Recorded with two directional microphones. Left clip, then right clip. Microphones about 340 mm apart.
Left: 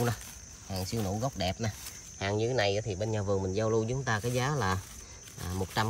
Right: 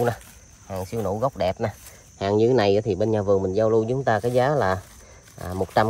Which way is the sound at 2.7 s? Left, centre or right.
Centre.